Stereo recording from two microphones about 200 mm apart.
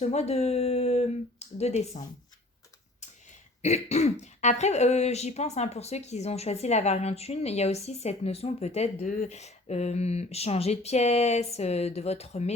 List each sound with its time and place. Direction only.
0.0 s speech: 35° left (ahead or behind)
3.6 s speech: 35° left (ahead or behind)